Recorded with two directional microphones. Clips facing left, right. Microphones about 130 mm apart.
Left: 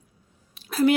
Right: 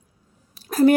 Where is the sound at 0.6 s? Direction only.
45° right (ahead or behind).